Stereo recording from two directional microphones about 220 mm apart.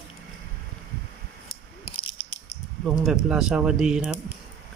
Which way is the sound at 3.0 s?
5° right (ahead or behind).